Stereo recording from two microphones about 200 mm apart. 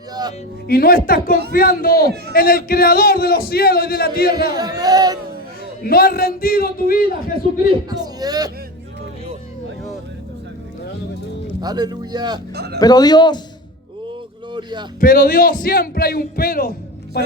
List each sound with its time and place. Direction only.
0.1 s music: 20° right (ahead or behind)
0.7 s a man's voice: 50° left (ahead or behind)
4.5 s a man's voice: 20° right (ahead or behind)
5.8 s a man's voice: 50° left (ahead or behind)
7.9 s a man's voice: 20° right (ahead or behind)
11.6 s a man's voice: 20° right (ahead or behind)
12.5 s a man's voice: 55° right (ahead or behind)
12.8 s a man's voice: 20° left (ahead or behind)
14.5 s a man's voice: 20° right (ahead or behind)
15.0 s a man's voice: 45° left (ahead or behind)